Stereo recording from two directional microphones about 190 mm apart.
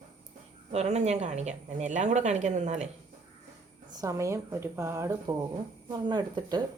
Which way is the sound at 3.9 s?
15° right (ahead or behind).